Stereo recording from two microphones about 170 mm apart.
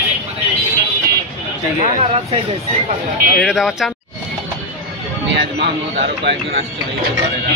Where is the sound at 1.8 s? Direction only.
35° right (ahead or behind).